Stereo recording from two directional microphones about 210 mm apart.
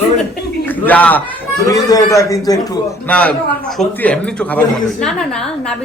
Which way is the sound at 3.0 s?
5° left (ahead or behind).